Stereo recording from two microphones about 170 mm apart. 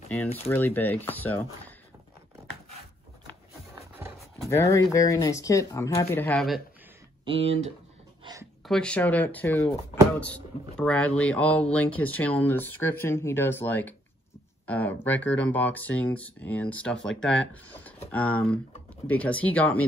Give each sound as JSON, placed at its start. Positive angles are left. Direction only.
{"t": 0.5, "sound": "speech", "side_deg": 10}
{"t": 4.5, "sound": "speech", "side_deg": 15}
{"t": 7.2, "sound": "speech", "side_deg": -35}
{"t": 8.2, "sound": "a sound", "side_deg": -20}
{"t": 8.6, "sound": "speech", "side_deg": 5}